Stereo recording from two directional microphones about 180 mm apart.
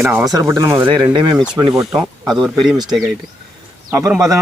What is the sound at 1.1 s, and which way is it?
Speech, 25° right (ahead or behind).